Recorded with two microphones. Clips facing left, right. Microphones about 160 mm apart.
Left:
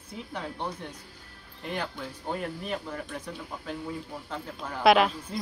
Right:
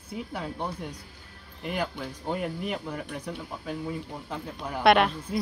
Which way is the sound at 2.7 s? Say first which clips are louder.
Right 1 dB; 10° right (ahead or behind).